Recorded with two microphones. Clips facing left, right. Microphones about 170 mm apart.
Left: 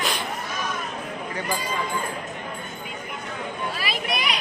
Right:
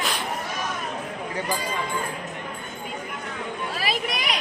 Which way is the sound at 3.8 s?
40° right (ahead or behind).